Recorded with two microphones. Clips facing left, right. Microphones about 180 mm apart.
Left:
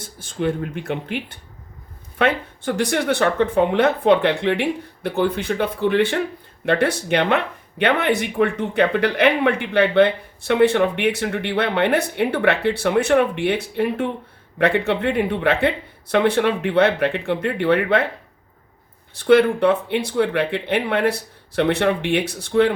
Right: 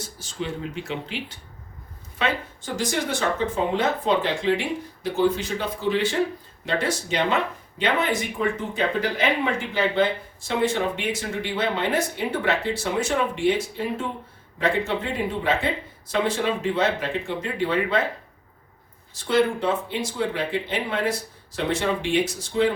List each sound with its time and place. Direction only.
0.0 s speech: 55° left (ahead or behind)
19.1 s speech: 60° left (ahead or behind)